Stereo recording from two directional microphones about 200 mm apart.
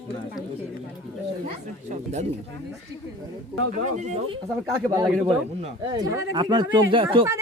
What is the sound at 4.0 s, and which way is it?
Speech, 35° right (ahead or behind).